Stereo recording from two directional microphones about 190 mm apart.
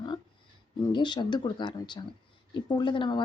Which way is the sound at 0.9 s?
25° left (ahead or behind).